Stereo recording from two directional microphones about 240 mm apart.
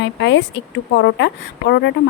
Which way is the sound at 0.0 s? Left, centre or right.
Left.